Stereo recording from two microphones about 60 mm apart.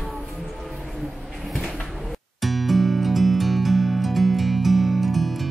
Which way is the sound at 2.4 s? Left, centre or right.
Centre.